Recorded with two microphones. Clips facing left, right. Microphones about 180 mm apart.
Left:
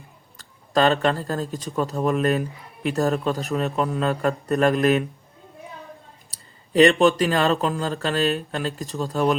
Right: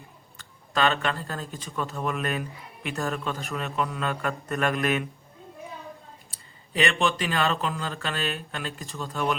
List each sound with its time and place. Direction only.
0.3 s speech: 40° left (ahead or behind)
6.3 s speech: 40° left (ahead or behind)